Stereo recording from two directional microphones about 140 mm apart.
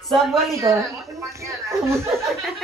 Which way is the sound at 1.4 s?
20° right (ahead or behind).